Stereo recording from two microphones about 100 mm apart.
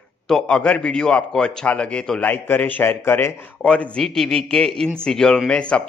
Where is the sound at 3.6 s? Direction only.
10° left (ahead or behind).